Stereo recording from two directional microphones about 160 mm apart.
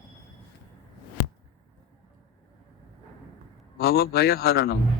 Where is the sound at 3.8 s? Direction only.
75° left (ahead or behind).